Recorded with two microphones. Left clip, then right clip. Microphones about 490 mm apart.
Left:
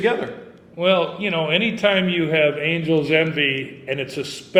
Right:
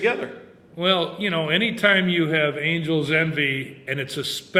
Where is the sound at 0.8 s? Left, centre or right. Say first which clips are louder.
Left 3 dB; right.